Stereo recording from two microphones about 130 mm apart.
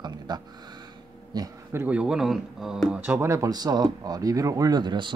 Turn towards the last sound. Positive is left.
turn(degrees=-35)  # may be behind; listen again after turning